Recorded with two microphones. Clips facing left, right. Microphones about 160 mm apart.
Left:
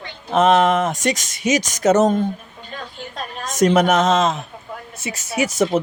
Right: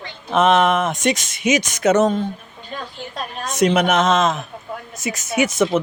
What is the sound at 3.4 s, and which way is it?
Speech, 45° left (ahead or behind).